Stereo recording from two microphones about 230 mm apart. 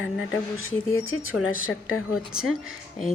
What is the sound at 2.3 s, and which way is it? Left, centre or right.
Speech, centre.